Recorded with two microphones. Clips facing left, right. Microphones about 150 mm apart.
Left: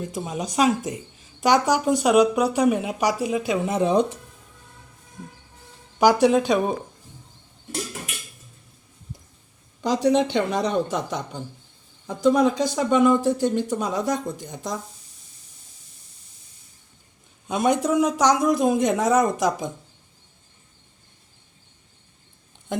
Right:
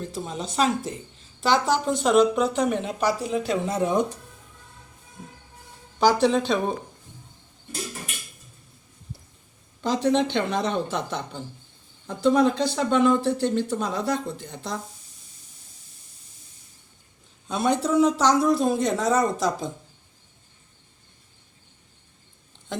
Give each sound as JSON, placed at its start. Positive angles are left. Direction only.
{"t": 0.0, "sound": "speech", "side_deg": 15}
{"t": 6.0, "sound": "speech", "side_deg": 15}
{"t": 9.8, "sound": "speech", "side_deg": 10}
{"t": 17.5, "sound": "speech", "side_deg": 15}